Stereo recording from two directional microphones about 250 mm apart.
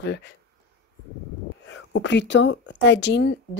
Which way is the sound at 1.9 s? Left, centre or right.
Left.